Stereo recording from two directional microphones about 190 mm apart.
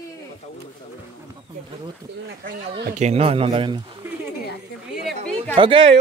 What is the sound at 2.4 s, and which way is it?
Speech, 55° right (ahead or behind).